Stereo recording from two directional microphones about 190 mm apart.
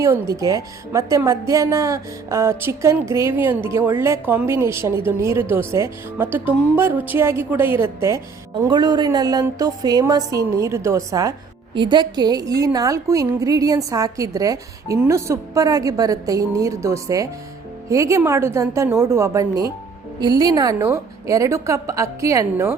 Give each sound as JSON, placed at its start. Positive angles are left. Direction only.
{"t": 0.3, "sound": "a woman's voice", "side_deg": -15}